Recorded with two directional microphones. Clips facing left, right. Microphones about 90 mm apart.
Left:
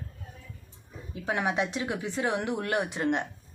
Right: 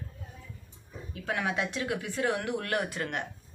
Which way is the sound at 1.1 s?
20° left (ahead or behind).